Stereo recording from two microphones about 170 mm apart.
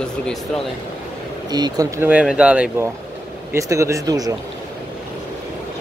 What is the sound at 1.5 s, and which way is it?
Speech, 25° right (ahead or behind).